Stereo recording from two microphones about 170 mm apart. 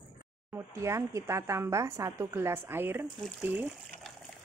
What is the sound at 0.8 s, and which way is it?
A woman's voice, 15° right (ahead or behind).